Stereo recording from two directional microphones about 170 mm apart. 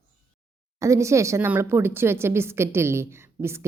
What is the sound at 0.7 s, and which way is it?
Speech, 15° right (ahead or behind).